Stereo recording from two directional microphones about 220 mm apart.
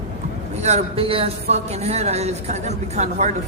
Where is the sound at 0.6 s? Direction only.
30° right (ahead or behind).